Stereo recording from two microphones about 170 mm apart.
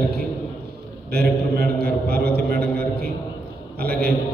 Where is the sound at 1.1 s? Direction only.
65° right (ahead or behind).